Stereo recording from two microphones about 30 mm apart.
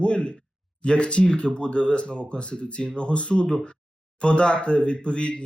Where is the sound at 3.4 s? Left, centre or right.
Left.